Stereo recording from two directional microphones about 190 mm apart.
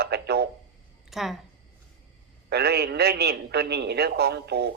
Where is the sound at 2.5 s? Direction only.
60° right (ahead or behind).